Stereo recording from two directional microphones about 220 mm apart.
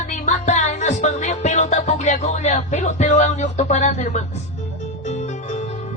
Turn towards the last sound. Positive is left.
turn(degrees=30)  # may be behind; listen again after turning